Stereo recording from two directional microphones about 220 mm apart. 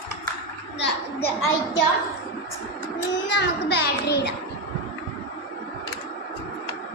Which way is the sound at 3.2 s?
50° left (ahead or behind).